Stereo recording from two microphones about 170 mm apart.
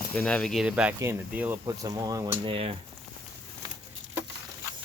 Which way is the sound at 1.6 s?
20° right (ahead or behind).